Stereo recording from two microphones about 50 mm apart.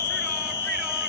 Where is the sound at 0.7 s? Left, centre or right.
Centre.